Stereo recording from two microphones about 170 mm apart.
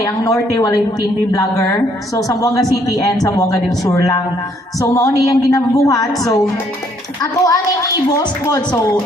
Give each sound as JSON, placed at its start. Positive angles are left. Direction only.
{"t": 0.0, "sound": "a woman's voice", "side_deg": 20}